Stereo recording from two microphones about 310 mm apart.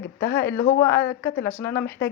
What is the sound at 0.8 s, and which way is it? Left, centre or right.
Speech, centre.